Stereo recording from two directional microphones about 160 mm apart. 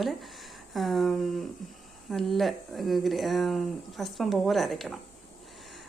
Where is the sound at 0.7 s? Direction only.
Centre (ahead or behind).